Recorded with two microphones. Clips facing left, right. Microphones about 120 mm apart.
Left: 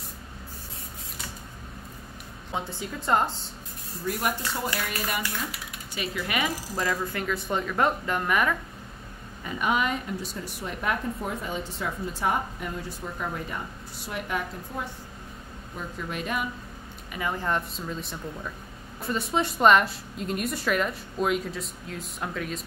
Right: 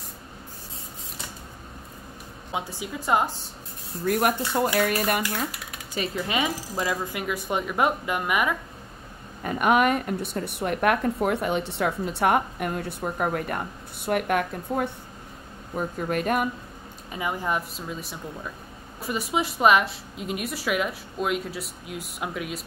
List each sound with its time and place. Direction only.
2.8 s a woman's voice: 10° right (ahead or behind)
4.0 s a woman's voice: 55° right (ahead or behind)
5.9 s a woman's voice: 30° right (ahead or behind); by 8.5 s 10° right (ahead or behind)
9.4 s a woman's voice: 55° right (ahead or behind)
15.7 s speech: 50° right (ahead or behind)
17.1 s a woman's voice: 15° right (ahead or behind)